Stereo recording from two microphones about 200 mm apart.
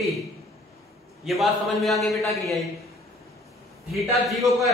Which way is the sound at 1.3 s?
Centre (ahead or behind).